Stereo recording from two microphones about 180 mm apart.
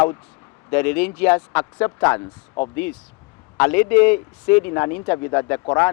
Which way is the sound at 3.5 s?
10° left (ahead or behind).